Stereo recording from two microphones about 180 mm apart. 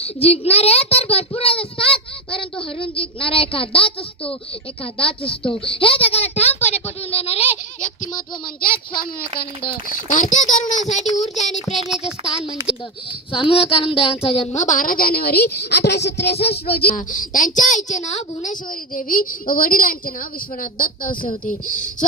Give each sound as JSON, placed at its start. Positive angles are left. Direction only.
{"t": 0.0, "sound": "a child's voice", "side_deg": 35}
{"t": 10.1, "sound": "a woman's voice", "side_deg": 45}
{"t": 11.7, "sound": "speech", "side_deg": -5}
{"t": 13.3, "sound": "a woman's voice", "side_deg": 30}
{"t": 18.9, "sound": "a woman's voice", "side_deg": 50}